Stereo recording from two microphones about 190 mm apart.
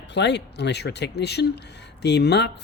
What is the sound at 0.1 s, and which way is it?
Speech, 65° left (ahead or behind).